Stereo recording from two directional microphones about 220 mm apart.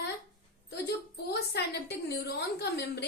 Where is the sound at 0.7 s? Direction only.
50° left (ahead or behind).